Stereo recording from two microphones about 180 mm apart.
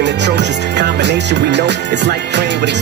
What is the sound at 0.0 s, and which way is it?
Music, 75° right (ahead or behind).